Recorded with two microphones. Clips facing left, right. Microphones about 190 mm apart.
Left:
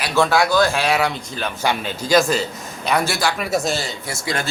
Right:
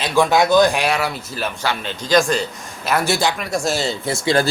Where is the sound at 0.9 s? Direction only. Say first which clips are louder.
Left 2 dB; 5° right (ahead or behind).